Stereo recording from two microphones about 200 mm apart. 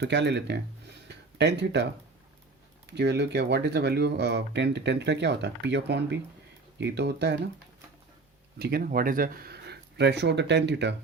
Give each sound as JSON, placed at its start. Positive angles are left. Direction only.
{"t": 0.0, "sound": "speech", "side_deg": -60}
{"t": 1.0, "sound": "a sound", "side_deg": -60}
{"t": 2.8, "sound": "speech", "side_deg": -60}
{"t": 8.5, "sound": "speech", "side_deg": -50}